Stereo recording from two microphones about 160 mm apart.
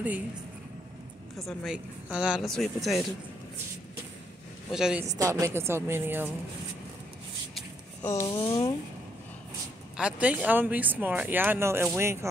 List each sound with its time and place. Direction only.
1.4 s speech: centre (ahead or behind)
4.6 s speech: 5° right (ahead or behind)
5.1 s speech: 20° right (ahead or behind)
8.0 s a sound: 15° left (ahead or behind)
8.4 s speech: 20° left (ahead or behind)
9.9 s speech: 10° right (ahead or behind)